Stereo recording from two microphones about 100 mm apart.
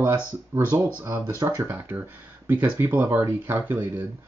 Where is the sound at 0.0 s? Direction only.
25° right (ahead or behind).